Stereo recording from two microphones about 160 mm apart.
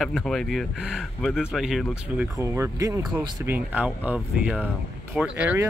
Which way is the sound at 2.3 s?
20° right (ahead or behind).